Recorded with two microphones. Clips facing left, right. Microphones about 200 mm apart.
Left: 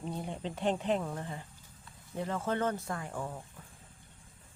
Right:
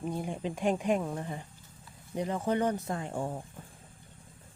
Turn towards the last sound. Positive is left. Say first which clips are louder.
# right 5 dB
turn(degrees=-30)  # may be behind; listen again after turning